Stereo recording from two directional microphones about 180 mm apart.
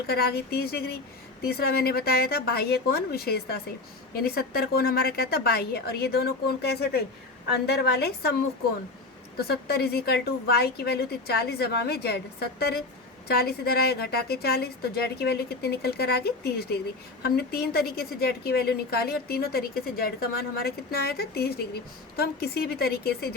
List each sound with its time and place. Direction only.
0.1 s a woman's voice: 60° left (ahead or behind)
9.4 s a woman's voice: 65° left (ahead or behind)